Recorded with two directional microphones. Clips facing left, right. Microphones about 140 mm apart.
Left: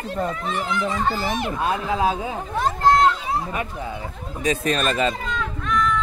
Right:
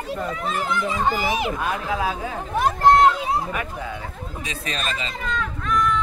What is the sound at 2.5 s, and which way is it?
Chatter, 10° right (ahead or behind).